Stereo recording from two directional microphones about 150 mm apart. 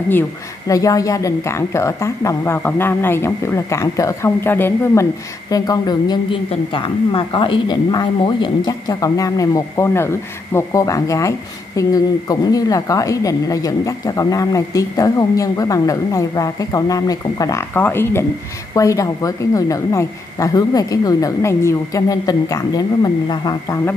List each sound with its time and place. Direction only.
0.7 s a woman's voice: 25° left (ahead or behind)
5.5 s a woman's voice: 25° left (ahead or behind)